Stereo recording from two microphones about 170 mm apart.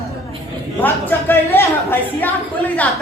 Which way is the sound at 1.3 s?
15° left (ahead or behind).